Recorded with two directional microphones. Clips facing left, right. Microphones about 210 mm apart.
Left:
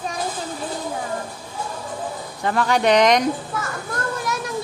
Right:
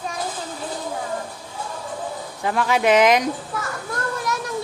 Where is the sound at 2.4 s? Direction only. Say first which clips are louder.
Left 1 dB; 5° right (ahead or behind).